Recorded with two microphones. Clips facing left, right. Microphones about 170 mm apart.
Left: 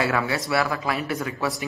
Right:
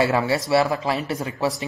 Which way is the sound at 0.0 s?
25° right (ahead or behind).